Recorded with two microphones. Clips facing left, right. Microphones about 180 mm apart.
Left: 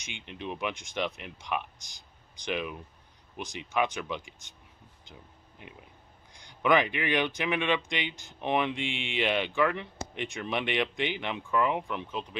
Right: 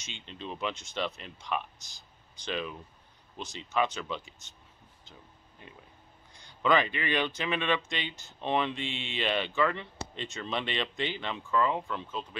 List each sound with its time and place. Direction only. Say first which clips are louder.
0.0 s speech: left 3 dB; 15° left (ahead or behind)
5.0 s a sound: left 2 dB; 15° left (ahead or behind)
6.3 s speech: left 1 dB; 15° left (ahead or behind)